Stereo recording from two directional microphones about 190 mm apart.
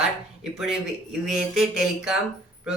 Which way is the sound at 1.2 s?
Centre (ahead or behind).